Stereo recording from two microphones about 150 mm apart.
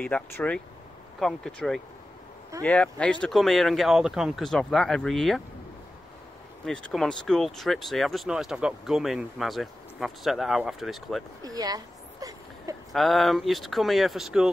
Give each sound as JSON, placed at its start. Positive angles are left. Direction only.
{"t": 0.0, "sound": "speech", "side_deg": 10}
{"t": 6.6, "sound": "speech", "side_deg": 0}
{"t": 11.4, "sound": "a sound", "side_deg": -25}
{"t": 12.9, "sound": "speech", "side_deg": 0}